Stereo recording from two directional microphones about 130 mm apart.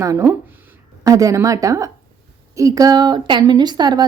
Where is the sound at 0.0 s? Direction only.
25° right (ahead or behind).